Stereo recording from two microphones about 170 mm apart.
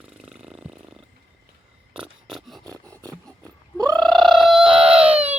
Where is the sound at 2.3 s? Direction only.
Centre (ahead or behind).